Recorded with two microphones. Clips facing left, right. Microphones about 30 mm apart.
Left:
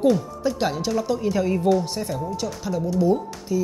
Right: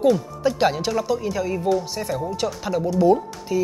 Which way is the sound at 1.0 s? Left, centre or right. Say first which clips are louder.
Left 1 dB; centre.